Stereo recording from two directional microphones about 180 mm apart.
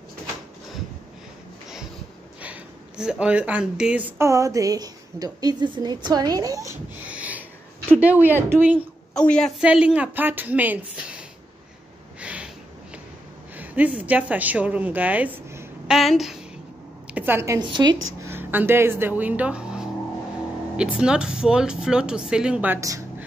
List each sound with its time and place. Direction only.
2.4 s speech: 5° right (ahead or behind)
4.2 s a woman's voice: 15° right (ahead or behind)
9.1 s a woman's voice: 5° left (ahead or behind)
12.2 s a sound: 5° right (ahead or behind)
13.6 s a woman's voice: 10° right (ahead or behind)
17.6 s a woman's voice: 25° right (ahead or behind)
18.2 s a woman's voice: 10° right (ahead or behind)